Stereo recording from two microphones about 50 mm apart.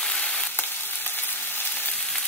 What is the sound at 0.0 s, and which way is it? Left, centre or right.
Frying, centre.